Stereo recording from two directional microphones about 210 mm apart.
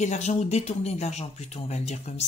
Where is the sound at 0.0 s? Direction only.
35° left (ahead or behind).